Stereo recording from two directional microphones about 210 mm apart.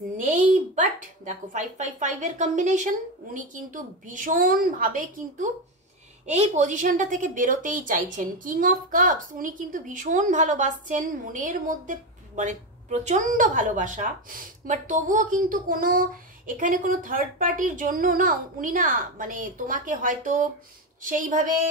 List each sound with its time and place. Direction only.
0.7 s a woman's voice: 35° right (ahead or behind)